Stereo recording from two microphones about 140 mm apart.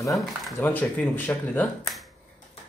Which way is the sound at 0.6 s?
15° left (ahead or behind).